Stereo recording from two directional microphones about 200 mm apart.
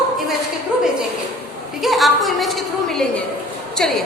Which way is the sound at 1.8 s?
Centre (ahead or behind).